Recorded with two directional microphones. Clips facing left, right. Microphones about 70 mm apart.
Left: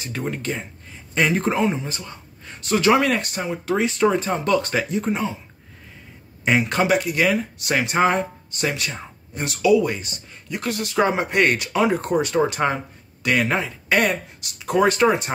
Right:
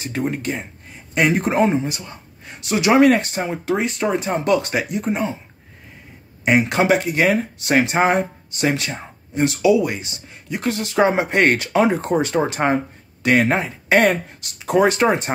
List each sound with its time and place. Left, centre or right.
0.4 s speech: centre
1.5 s speech: right
1.9 s speech: centre
3.7 s speech: centre
4.1 s speech: centre
4.8 s speech: centre
6.6 s speech: right